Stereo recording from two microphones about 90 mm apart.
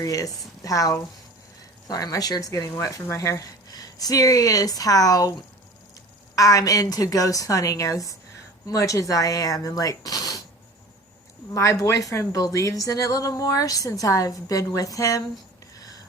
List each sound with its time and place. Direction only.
0.0 s speech: 40° left (ahead or behind)
6.3 s speech: 40° left (ahead or behind)
11.5 s speech: 35° left (ahead or behind)